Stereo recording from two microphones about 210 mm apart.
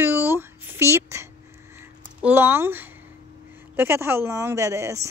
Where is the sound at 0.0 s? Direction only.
10° right (ahead or behind).